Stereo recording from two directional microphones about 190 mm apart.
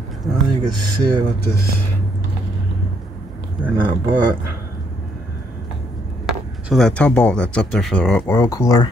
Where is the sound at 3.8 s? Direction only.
25° right (ahead or behind).